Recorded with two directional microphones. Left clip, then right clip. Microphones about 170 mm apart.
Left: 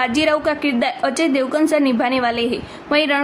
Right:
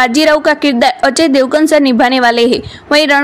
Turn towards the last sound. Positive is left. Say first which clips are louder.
# right 8 dB
turn(degrees=-35)  # may be behind; listen again after turning